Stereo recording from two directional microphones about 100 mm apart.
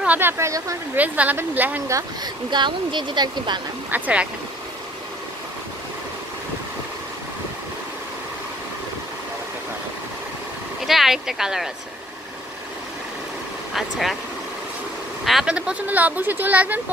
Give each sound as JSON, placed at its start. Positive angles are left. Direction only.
{"t": 0.0, "sound": "speech", "side_deg": -20}
{"t": 0.9, "sound": "speech", "side_deg": -15}
{"t": 1.9, "sound": "speech", "side_deg": -35}
{"t": 2.5, "sound": "speech", "side_deg": -50}
{"t": 3.9, "sound": "speech", "side_deg": -15}
{"t": 10.9, "sound": "speech", "side_deg": -5}
{"t": 13.7, "sound": "speech", "side_deg": 0}
{"t": 15.2, "sound": "speech", "side_deg": -5}